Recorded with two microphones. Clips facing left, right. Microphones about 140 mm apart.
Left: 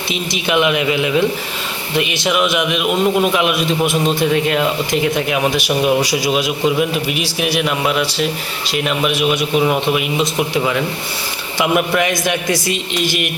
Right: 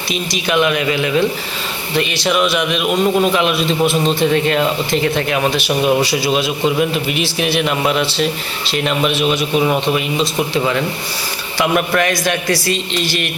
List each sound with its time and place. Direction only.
0.1 s a man's voice: 20° left (ahead or behind)